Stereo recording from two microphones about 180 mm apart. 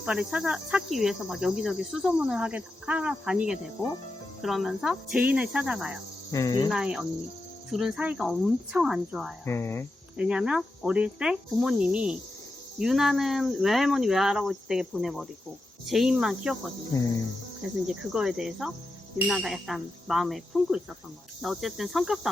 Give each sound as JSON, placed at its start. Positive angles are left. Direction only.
{"t": 0.0, "sound": "cricket", "side_deg": -5}
{"t": 6.3, "sound": "speech", "side_deg": 20}
{"t": 6.7, "sound": "cricket", "side_deg": -5}
{"t": 9.5, "sound": "speech", "side_deg": 15}
{"t": 10.2, "sound": "cricket", "side_deg": -5}
{"t": 17.8, "sound": "cricket", "side_deg": -5}